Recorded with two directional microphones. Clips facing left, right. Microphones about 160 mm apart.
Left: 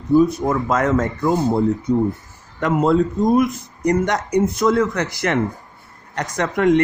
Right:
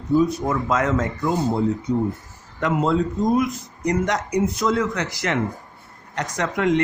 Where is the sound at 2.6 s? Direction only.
50° left (ahead or behind).